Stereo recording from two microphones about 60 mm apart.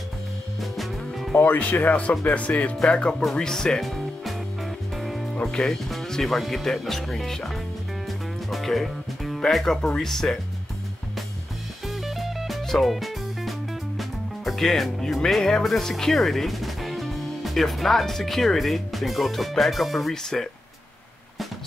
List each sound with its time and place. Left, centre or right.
0.6 s music: centre
1.3 s speech: left; by 3.8 s centre
3.8 s music: centre
5.3 s speech: centre
8.5 s music: centre
9.4 s speech: centre
11.9 s speech: centre